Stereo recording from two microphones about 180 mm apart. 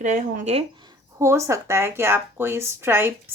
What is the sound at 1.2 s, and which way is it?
Speech, 15° right (ahead or behind).